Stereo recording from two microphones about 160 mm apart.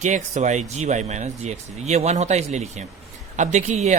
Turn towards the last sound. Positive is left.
turn(degrees=-45)  # may be behind; listen again after turning